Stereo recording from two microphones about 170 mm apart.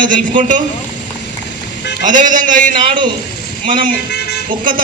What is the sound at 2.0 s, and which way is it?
Speech, 50° right (ahead or behind).